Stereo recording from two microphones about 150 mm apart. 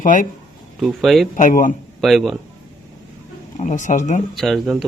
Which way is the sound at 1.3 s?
60° left (ahead or behind).